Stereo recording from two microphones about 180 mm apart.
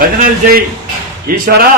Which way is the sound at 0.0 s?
55° right (ahead or behind).